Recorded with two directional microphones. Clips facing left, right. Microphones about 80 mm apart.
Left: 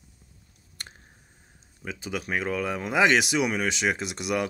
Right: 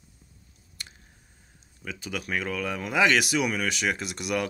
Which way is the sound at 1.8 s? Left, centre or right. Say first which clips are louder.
Left 2 dB; left.